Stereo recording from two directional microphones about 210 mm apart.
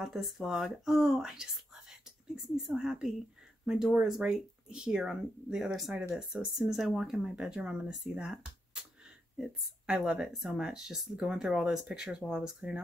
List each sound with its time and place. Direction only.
0.0 s speech: centre (ahead or behind)
9.8 s speech: 5° right (ahead or behind)